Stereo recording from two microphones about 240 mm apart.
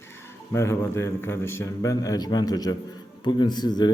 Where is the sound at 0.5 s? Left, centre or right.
Centre.